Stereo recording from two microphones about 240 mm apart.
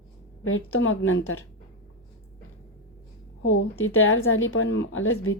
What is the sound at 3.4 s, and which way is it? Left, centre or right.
A woman's voice, left.